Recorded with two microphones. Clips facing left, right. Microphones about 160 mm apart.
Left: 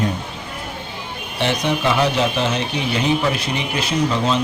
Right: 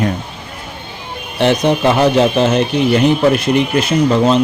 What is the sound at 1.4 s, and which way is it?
Speech, 50° right (ahead or behind).